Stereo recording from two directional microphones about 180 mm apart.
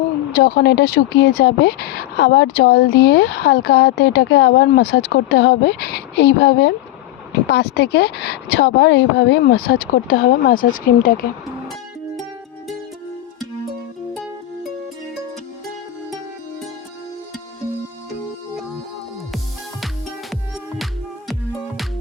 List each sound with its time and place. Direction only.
0.3 s speech: 60° left (ahead or behind)
4.7 s speech: 60° left (ahead or behind)